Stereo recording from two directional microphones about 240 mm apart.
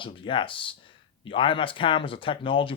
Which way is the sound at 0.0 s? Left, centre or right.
Left.